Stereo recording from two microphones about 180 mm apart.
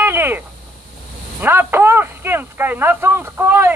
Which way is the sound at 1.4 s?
10° right (ahead or behind).